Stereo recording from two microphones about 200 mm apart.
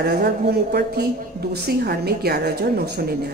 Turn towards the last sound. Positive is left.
turn(degrees=-55)  # may be behind; listen again after turning